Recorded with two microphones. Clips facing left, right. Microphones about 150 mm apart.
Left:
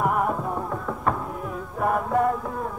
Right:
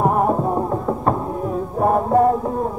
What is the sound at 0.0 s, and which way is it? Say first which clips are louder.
Music: right 6 dB; 35° right (ahead or behind).